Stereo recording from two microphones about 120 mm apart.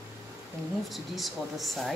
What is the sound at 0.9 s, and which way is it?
Speech, centre (ahead or behind).